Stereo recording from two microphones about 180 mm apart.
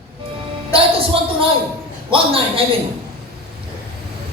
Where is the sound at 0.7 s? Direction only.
30° right (ahead or behind).